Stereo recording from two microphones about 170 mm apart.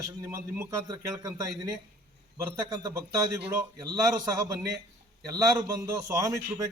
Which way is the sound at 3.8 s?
20° right (ahead or behind).